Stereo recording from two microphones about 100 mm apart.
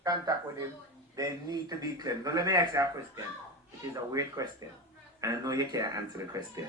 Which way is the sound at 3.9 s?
35° right (ahead or behind).